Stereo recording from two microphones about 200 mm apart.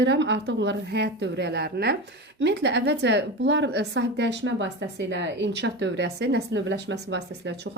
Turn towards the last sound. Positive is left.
turn(degrees=-60)  # may be behind; listen again after turning